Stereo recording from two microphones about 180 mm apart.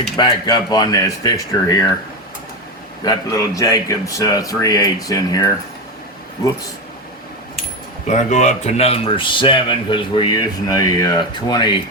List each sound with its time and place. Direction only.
0.2 s a man's voice: 20° left (ahead or behind)
3.0 s a man's voice: 20° left (ahead or behind)
8.0 s a man's voice: 40° left (ahead or behind); by 11.8 s 25° left (ahead or behind)